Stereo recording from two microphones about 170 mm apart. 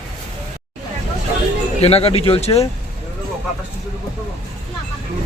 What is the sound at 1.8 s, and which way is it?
Speech, 35° left (ahead or behind).